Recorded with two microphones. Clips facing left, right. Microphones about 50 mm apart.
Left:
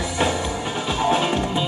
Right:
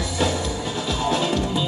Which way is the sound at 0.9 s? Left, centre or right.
Left.